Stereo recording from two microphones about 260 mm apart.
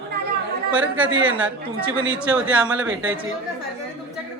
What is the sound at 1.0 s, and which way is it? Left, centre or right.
Speech, right.